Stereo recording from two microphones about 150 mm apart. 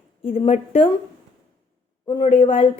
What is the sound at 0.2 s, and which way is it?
Speech, 40° left (ahead or behind).